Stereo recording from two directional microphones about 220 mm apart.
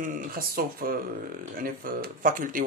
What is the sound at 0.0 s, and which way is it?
Speech, 40° right (ahead or behind).